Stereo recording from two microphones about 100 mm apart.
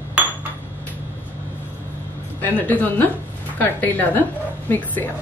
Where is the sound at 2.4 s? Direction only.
15° left (ahead or behind).